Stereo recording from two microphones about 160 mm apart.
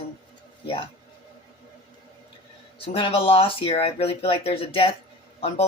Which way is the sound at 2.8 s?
35° left (ahead or behind).